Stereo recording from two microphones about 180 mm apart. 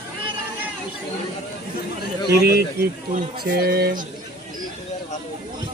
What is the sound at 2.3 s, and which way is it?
Speech, 60° right (ahead or behind).